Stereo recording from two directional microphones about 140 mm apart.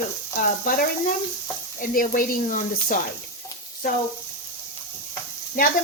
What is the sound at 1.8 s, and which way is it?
Speech, 80° left.